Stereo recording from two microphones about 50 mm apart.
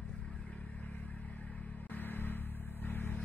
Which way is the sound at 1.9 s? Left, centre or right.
Left.